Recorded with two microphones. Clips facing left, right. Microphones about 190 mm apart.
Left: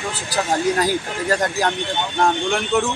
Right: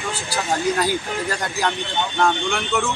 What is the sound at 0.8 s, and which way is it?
Speech, 40° left (ahead or behind).